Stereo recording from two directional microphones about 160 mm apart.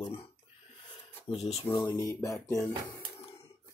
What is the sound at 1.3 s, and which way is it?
Speech, 40° left (ahead or behind).